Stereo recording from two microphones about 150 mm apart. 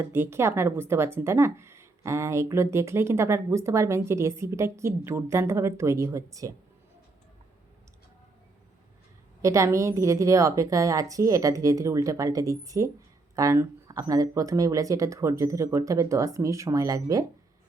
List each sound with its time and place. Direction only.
0.0 s speech: 15° right (ahead or behind)
9.4 s speech: 20° right (ahead or behind)